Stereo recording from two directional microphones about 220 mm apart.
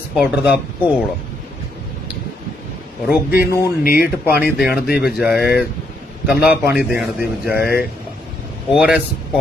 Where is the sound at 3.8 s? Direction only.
45° left (ahead or behind).